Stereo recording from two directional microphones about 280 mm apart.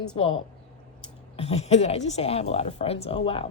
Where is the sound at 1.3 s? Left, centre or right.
Left.